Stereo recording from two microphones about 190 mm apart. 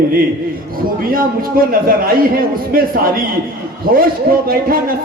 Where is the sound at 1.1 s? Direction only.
50° right (ahead or behind).